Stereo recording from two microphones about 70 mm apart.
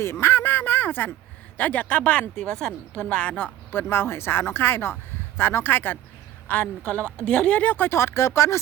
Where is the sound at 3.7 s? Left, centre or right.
Left.